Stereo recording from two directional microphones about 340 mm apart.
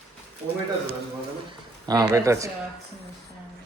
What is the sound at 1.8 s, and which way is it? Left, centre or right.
Speech, centre.